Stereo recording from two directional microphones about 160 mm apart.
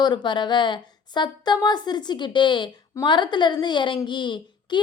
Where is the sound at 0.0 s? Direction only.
30° left (ahead or behind).